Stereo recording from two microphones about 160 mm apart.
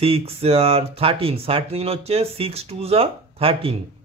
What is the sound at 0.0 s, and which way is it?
A man's voice, 35° right (ahead or behind).